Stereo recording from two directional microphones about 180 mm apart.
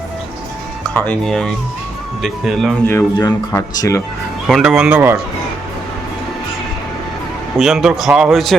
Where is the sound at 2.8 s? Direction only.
15° left (ahead or behind).